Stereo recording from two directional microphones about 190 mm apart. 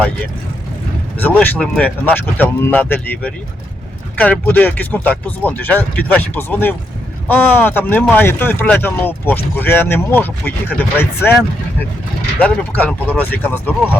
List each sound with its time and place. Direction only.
1.2 s speech: 10° left (ahead or behind)
12.4 s speech: 10° left (ahead or behind)